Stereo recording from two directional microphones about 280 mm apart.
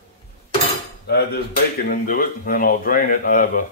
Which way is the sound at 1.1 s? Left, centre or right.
Left.